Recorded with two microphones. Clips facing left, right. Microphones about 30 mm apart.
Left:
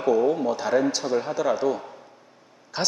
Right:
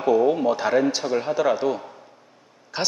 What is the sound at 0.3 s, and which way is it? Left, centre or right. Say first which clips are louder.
A man's voice: right 2 dB; right.